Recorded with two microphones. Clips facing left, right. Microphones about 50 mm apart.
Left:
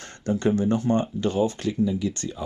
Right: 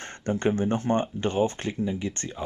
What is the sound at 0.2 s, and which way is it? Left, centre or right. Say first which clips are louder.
Speech: left 2 dB; right.